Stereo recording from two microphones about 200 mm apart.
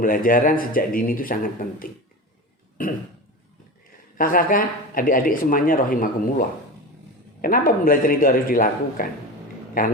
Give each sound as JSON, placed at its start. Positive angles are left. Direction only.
{"t": 0.0, "sound": "speech", "side_deg": 45}
{"t": 4.2, "sound": "speech", "side_deg": 45}
{"t": 7.4, "sound": "speech", "side_deg": 45}